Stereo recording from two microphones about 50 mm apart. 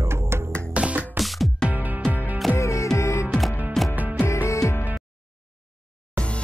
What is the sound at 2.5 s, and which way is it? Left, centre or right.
Music, left.